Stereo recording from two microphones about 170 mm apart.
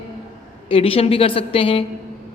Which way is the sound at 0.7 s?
35° left (ahead or behind).